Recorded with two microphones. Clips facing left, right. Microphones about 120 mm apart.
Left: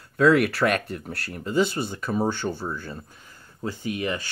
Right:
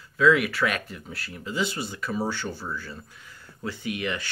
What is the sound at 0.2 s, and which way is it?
Speech, 55° left (ahead or behind).